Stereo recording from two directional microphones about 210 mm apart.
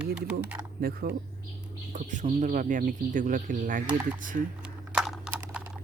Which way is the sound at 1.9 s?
35° right (ahead or behind).